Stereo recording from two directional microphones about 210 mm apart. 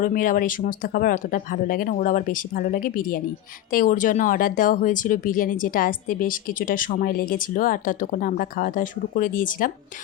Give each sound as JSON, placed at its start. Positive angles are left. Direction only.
{"t": 0.0, "sound": "speech", "side_deg": 40}